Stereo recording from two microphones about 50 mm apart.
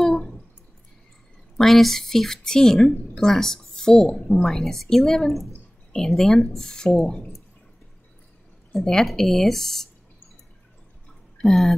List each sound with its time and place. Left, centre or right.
0.0 s a sound: centre
1.6 s a woman's voice: centre
4.5 s a woman's voice: centre
7.1 s speech: centre
8.7 s a woman's voice: centre
11.4 s speech: centre